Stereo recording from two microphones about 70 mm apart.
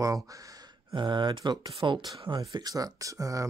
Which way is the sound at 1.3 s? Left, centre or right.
Right.